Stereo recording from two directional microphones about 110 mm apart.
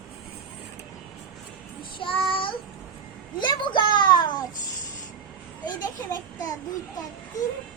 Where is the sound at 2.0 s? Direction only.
55° left (ahead or behind).